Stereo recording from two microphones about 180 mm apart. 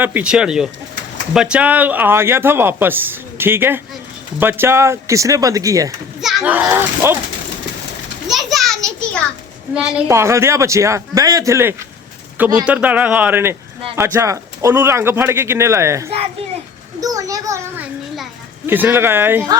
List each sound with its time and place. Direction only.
0.0 s speech: 10° right (ahead or behind)
8.3 s a sound: centre (ahead or behind)
9.7 s a child's voice: 5° right (ahead or behind)